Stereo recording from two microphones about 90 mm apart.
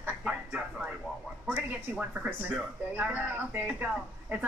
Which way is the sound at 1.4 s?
15° right (ahead or behind).